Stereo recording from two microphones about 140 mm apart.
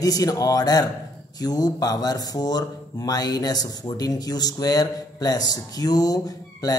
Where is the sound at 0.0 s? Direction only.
25° left (ahead or behind).